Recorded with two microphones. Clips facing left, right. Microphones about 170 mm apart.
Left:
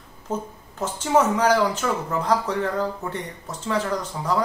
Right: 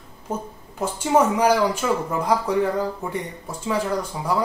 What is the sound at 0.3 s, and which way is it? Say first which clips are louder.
Speech: left 1 dB; 10° right (ahead or behind).